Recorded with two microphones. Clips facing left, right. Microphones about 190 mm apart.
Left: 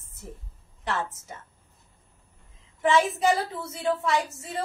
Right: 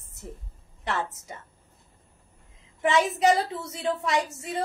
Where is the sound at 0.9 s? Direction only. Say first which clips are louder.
Even; 70° right (ahead or behind).